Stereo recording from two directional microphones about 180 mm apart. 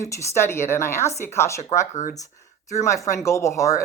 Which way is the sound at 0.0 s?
15° left (ahead or behind).